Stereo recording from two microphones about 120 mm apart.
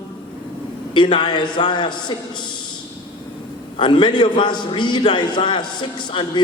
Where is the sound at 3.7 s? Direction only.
40° left (ahead or behind).